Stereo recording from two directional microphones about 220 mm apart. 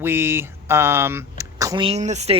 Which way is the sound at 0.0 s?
10° right (ahead or behind).